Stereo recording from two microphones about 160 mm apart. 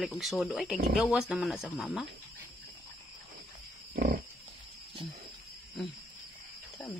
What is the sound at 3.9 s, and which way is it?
Pig, 60° right (ahead or behind).